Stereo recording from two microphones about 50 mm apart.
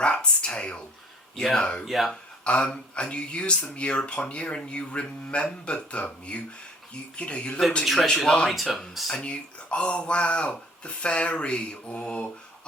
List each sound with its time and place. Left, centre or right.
0.0 s a man's voice: centre
1.8 s speech: centre
2.4 s a man's voice: left
7.9 s speech: centre
8.4 s speech: centre
9.0 s a man's voice: centre